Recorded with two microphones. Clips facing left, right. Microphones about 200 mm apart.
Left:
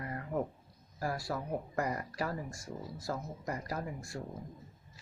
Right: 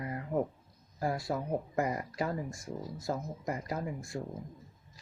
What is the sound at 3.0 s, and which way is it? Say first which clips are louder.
Speech: right 3 dB; 20° right (ahead or behind).